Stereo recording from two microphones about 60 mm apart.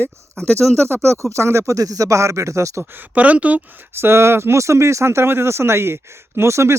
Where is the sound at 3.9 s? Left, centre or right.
Right.